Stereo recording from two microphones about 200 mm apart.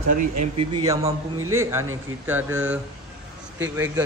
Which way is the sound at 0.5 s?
20° right (ahead or behind).